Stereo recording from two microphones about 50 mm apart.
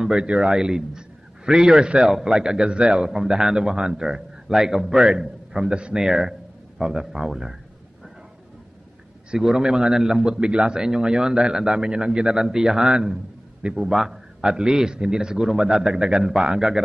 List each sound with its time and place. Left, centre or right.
0.0 s a man's voice: centre
1.9 s a man's voice: right
9.4 s a man's voice: centre